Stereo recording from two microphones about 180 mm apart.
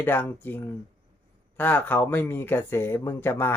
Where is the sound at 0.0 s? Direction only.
10° left (ahead or behind).